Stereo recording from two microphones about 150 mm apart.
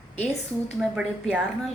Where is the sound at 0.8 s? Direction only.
5° right (ahead or behind).